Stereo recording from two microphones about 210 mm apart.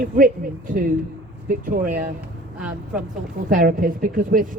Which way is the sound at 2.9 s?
5° right (ahead or behind).